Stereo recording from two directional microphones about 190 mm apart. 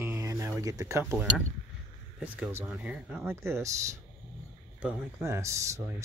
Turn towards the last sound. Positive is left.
turn(degrees=-15)  # may be behind; listen again after turning